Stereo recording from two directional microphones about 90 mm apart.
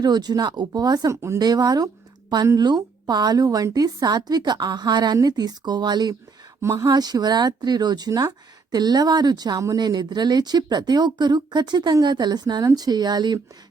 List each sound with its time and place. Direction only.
0.0 s speech: 50° right (ahead or behind); by 1.4 s 35° right (ahead or behind)
1.4 s speech: 50° right (ahead or behind)
6.6 s speech: 30° right (ahead or behind)
6.8 s speech: 50° right (ahead or behind)